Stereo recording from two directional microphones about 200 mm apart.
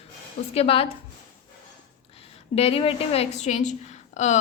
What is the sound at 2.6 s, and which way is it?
A woman's voice, 30° left (ahead or behind).